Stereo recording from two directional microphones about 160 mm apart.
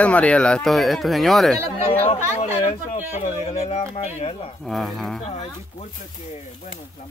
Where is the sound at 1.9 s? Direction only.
40° left (ahead or behind).